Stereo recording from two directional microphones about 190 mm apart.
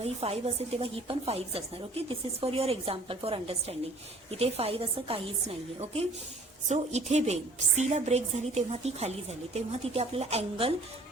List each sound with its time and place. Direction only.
0.0 s a woman's voice: 30° right (ahead or behind)